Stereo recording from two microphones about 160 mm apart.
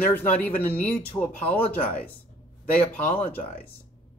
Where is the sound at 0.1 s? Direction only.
10° left (ahead or behind).